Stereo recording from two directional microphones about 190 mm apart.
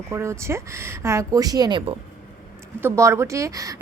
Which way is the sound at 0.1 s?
15° right (ahead or behind).